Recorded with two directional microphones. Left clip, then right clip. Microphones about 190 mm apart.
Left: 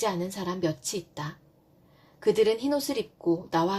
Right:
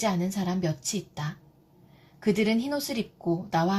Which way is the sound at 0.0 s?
40° left (ahead or behind).